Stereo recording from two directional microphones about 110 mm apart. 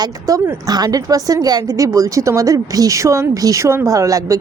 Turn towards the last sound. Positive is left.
turn(degrees=-30)  # may be behind; listen again after turning